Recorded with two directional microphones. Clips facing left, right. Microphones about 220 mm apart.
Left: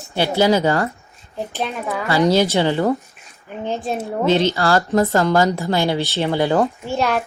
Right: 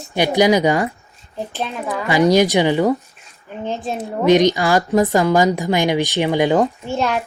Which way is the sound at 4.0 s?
15° right (ahead or behind).